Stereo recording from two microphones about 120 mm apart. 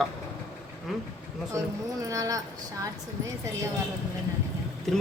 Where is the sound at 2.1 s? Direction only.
30° right (ahead or behind).